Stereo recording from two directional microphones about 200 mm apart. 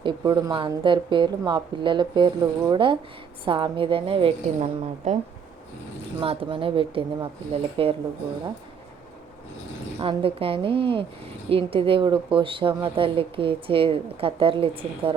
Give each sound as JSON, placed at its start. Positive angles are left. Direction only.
{"t": 0.0, "sound": "a woman's voice", "side_deg": -25}
{"t": 6.1, "sound": "a woman's voice", "side_deg": -25}
{"t": 10.0, "sound": "a woman's voice", "side_deg": -30}